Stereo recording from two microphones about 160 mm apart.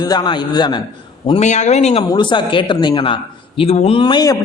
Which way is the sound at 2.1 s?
30° left (ahead or behind).